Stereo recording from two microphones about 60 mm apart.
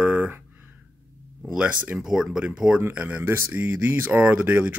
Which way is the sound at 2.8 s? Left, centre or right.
Right.